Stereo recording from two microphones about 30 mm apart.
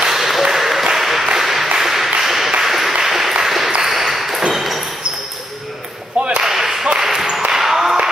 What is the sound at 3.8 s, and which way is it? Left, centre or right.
Ping, centre.